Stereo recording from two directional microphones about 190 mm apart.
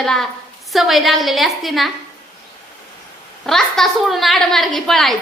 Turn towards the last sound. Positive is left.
turn(degrees=0)  # may be behind; listen again after turning